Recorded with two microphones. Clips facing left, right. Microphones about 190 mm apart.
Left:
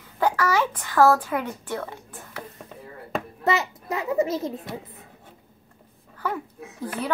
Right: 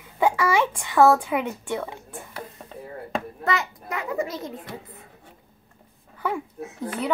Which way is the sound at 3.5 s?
25° left (ahead or behind).